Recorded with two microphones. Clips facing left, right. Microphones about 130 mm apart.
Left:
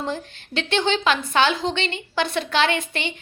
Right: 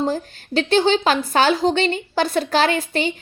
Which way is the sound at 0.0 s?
40° right (ahead or behind).